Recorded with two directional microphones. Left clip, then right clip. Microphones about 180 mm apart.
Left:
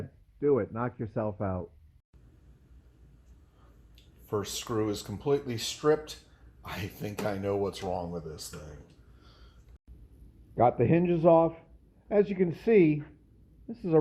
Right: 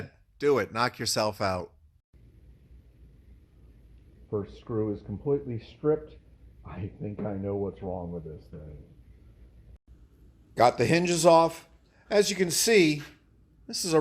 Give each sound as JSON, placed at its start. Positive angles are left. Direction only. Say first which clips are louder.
{"t": 0.3, "sound": "a man's voice", "louder": "right 3 dB", "side_deg": -10}
{"t": 4.3, "sound": "speech", "louder": "left 1 dB", "side_deg": 25}
{"t": 10.5, "sound": "a man's voice", "louder": "right 2 dB", "side_deg": -10}